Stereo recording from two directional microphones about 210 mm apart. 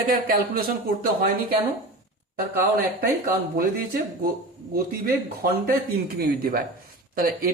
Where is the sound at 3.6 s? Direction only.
45° right (ahead or behind).